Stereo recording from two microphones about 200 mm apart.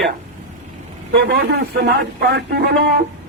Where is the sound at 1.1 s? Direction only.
55° right (ahead or behind).